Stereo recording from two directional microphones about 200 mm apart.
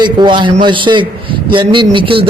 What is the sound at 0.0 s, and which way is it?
Speech, 25° right (ahead or behind).